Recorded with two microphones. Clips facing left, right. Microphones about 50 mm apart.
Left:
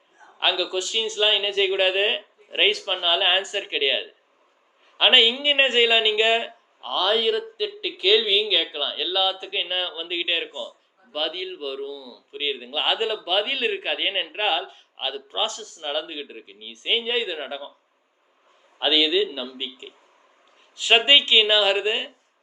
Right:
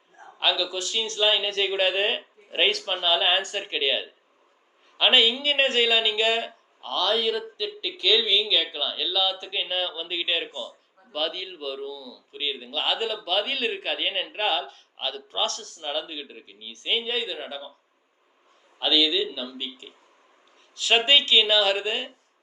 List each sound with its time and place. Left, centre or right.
0.3 s speech: centre
12.3 s speech: left
18.8 s speech: left